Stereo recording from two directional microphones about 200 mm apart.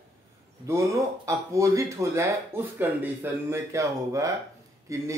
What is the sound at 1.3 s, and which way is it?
Speech, 15° right (ahead or behind).